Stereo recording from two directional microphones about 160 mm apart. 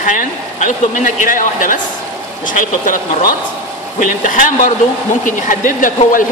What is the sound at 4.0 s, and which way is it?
Speech, 55° left (ahead or behind).